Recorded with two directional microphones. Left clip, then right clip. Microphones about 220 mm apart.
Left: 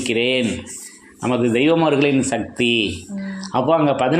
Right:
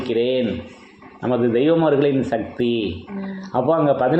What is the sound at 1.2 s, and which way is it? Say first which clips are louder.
Speech: even; 20° left (ahead or behind).